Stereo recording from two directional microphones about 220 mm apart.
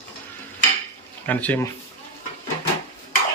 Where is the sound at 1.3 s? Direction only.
5° left (ahead or behind).